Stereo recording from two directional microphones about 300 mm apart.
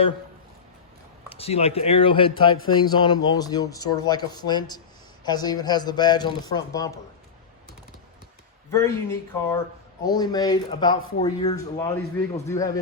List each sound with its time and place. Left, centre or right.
1.3 s speech: centre
8.7 s speech: centre